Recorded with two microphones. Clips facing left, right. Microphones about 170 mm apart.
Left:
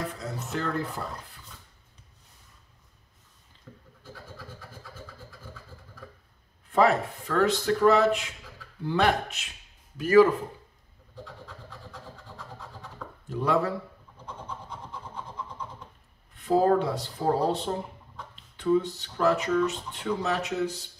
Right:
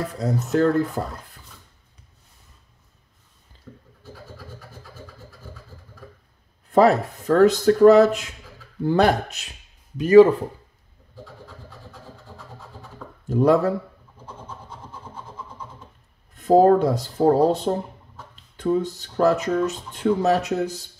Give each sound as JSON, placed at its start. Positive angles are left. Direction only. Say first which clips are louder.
{"t": 0.2, "sound": "speech", "louder": "right 12 dB", "side_deg": -40}
{"t": 3.7, "sound": "goat", "louder": "right 5 dB", "side_deg": 0}
{"t": 6.7, "sound": "speech", "louder": "right 6 dB", "side_deg": -40}
{"t": 9.9, "sound": "speech", "louder": "right 7 dB", "side_deg": -20}
{"t": 13.3, "sound": "speech", "louder": "right 8 dB", "side_deg": -40}
{"t": 16.3, "sound": "speech", "louder": "right 7 dB", "side_deg": -45}